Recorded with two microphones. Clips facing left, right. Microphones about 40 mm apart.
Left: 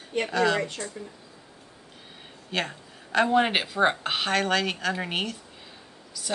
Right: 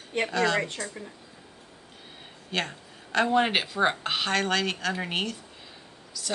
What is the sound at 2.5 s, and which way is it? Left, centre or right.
Speech, centre.